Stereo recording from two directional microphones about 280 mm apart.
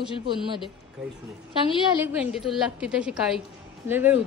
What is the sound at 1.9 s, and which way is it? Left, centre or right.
A woman's voice, centre.